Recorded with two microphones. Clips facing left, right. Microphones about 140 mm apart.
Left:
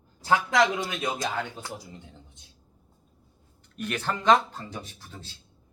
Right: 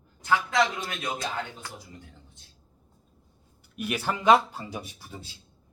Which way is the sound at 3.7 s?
10° right (ahead or behind).